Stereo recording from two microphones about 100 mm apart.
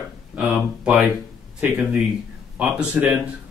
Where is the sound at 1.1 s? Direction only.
20° right (ahead or behind).